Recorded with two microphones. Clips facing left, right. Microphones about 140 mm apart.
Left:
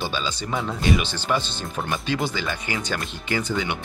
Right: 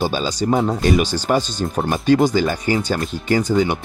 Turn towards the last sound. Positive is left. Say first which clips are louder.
# right 8 dB
turn(degrees=-40)  # may be behind; listen again after turning